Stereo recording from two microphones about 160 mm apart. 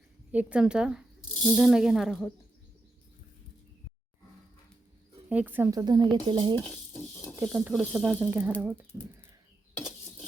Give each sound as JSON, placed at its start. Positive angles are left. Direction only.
{"t": 0.3, "sound": "speech", "side_deg": -10}
{"t": 5.3, "sound": "speech", "side_deg": -10}
{"t": 5.8, "sound": "stir", "side_deg": -25}
{"t": 7.4, "sound": "speech", "side_deg": -5}
{"t": 8.9, "sound": "speech", "side_deg": 10}